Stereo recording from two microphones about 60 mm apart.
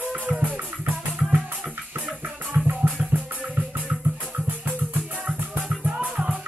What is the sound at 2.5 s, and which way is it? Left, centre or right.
Music, right.